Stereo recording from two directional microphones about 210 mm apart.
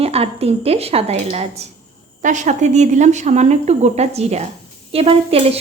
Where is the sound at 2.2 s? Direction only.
35° right (ahead or behind).